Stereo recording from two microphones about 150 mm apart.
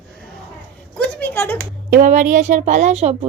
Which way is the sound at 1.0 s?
15° left (ahead or behind).